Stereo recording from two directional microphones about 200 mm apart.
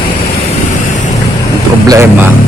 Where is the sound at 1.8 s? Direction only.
15° right (ahead or behind).